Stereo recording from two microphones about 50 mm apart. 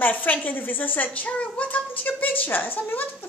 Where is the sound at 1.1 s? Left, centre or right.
Left.